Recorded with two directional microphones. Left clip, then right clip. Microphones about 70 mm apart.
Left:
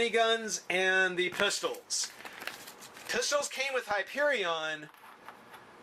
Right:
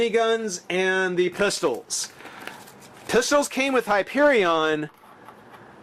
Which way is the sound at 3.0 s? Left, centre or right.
Right.